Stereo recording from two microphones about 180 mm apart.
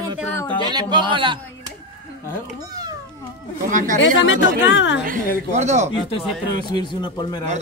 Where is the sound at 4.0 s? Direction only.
90° left.